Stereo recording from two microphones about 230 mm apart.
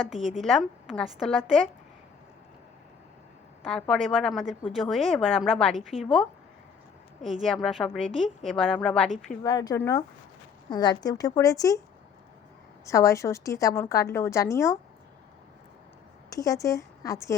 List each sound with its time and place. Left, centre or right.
0.3 s a woman's voice: centre
3.7 s a woman's voice: centre
7.4 s a woman's voice: centre
9.4 s a woman's voice: centre
12.8 s a woman's voice: centre
16.3 s a woman's voice: centre